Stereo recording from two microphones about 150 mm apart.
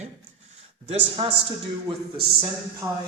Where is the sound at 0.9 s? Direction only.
40° right (ahead or behind).